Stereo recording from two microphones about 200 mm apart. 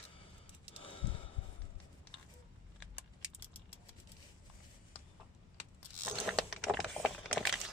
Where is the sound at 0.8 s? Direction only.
25° left (ahead or behind).